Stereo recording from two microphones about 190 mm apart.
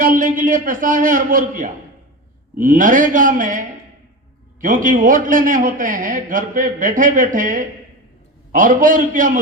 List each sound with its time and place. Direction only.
0.0 s a man's voice: 45° right (ahead or behind)